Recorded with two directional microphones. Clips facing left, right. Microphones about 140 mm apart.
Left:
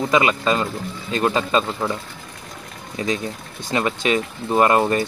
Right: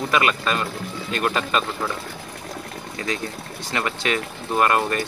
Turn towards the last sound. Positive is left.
turn(degrees=25)  # may be behind; listen again after turning